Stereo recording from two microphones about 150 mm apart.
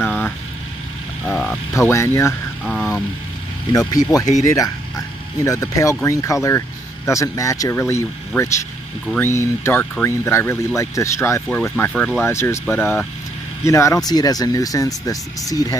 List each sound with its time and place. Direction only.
0.0 s vehicle: 10° left (ahead or behind)
1.2 s speech: centre (ahead or behind)
1.7 s speech: 20° left (ahead or behind)
2.6 s speech: centre (ahead or behind)
3.7 s speech: 25° left (ahead or behind)
11.4 s speech: 5° left (ahead or behind); by 14.9 s 25° left (ahead or behind)